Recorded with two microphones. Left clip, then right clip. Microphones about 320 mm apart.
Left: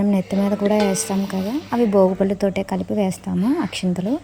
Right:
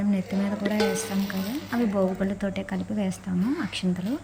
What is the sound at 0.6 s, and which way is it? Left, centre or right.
Speech, centre.